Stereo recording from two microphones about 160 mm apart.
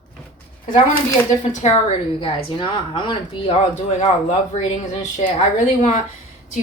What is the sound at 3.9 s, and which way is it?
Speech, 45° left (ahead or behind).